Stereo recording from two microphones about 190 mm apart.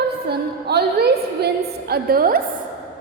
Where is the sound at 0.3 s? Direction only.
55° right (ahead or behind).